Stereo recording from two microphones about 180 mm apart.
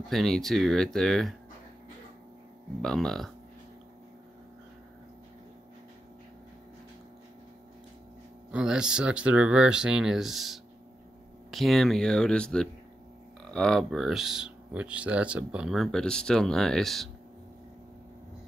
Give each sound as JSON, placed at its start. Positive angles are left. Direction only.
{"t": 0.1, "sound": "speech", "side_deg": 0}
{"t": 2.8, "sound": "speech", "side_deg": 0}
{"t": 8.5, "sound": "speech", "side_deg": -5}